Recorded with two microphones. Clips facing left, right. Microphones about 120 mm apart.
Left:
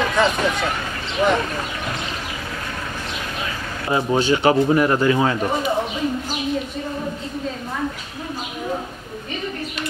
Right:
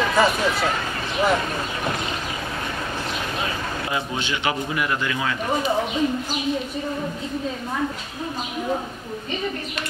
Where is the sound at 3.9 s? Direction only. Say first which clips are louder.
Left 11 dB; 35° left (ahead or behind).